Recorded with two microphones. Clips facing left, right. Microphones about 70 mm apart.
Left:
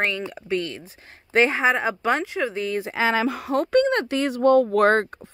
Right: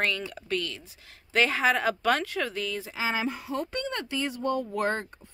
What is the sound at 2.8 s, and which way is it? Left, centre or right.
Speech, left.